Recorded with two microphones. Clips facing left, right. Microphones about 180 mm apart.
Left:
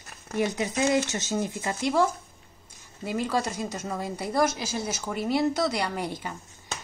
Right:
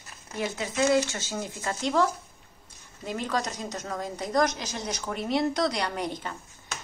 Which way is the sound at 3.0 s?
5° left (ahead or behind).